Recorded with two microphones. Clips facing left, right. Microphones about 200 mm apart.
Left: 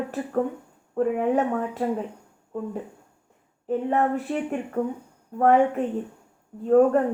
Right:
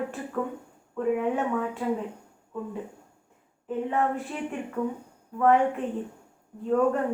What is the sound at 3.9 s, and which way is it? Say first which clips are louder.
A woman's voice: left 4 dB; 40° left (ahead or behind).